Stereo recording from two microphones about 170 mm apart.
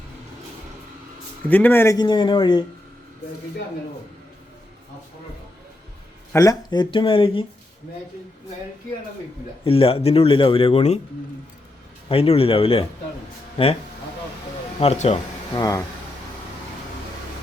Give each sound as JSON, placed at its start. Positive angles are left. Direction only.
{"t": 1.5, "sound": "speech", "side_deg": 10}
{"t": 2.0, "sound": "speech", "side_deg": 30}
{"t": 6.3, "sound": "speech", "side_deg": 20}
{"t": 9.6, "sound": "a man's voice", "side_deg": 35}
{"t": 12.0, "sound": "a man's voice", "side_deg": 35}
{"t": 14.8, "sound": "a man's voice", "side_deg": 40}
{"t": 15.5, "sound": "speech", "side_deg": 20}